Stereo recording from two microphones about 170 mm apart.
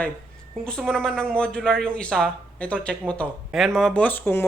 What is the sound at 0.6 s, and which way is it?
Speech, 5° left (ahead or behind).